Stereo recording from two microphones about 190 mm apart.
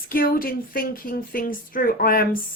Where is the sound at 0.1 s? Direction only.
50° left (ahead or behind).